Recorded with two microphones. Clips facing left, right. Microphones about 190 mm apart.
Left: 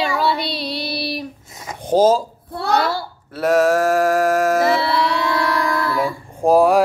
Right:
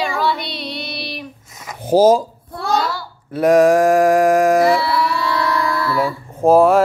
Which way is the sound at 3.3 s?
15° right (ahead or behind).